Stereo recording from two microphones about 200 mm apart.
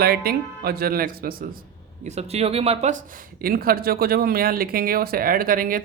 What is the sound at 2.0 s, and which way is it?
Speech, 35° right (ahead or behind).